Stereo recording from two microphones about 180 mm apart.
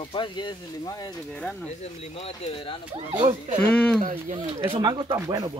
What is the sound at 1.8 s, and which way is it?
Speech, 35° left (ahead or behind).